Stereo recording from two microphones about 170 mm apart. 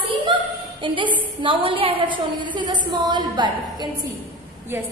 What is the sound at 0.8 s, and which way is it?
A woman's voice, 30° right (ahead or behind).